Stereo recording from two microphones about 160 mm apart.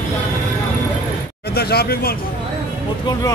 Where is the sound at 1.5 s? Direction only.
75° left (ahead or behind).